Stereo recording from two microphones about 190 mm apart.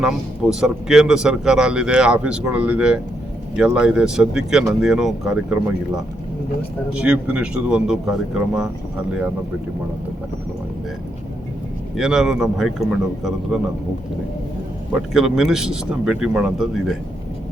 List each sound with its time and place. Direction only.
0.0 s speech: 5° right (ahead or behind)
6.9 s speech: 5° right (ahead or behind)
11.9 s speech: 5° right (ahead or behind)
15.1 s speech: 5° right (ahead or behind)